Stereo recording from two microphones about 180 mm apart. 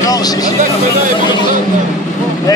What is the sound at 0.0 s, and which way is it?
Speech, 20° left (ahead or behind).